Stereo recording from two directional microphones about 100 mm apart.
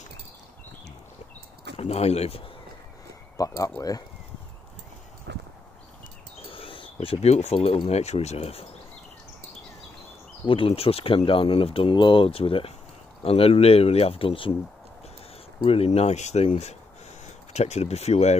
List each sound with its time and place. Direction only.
1.8 s speech: 90° left
3.3 s speech: 35° left (ahead or behind)
6.4 s a sound: 65° left (ahead or behind); by 7.8 s 85° left
7.9 s speech: 90° left
10.4 s speech: 60° left (ahead or behind)
15.6 s speech: 75° left (ahead or behind)